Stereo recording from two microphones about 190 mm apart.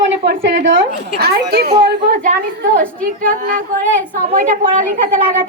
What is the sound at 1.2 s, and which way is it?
A woman's voice, 55° right (ahead or behind).